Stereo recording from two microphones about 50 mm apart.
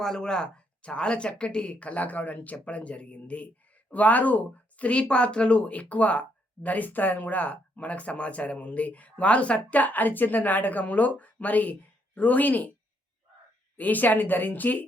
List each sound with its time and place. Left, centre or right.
0.0 s speech: centre; by 12.7 s left
13.7 s speech: left